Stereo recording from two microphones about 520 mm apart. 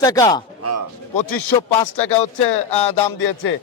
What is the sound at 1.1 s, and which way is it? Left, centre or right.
Speech, left.